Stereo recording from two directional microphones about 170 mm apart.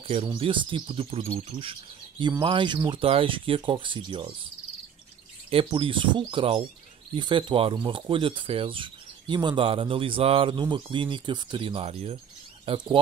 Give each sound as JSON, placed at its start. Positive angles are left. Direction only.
{"t": 0.0, "sound": "speech", "side_deg": -30}
{"t": 5.5, "sound": "speech", "side_deg": -30}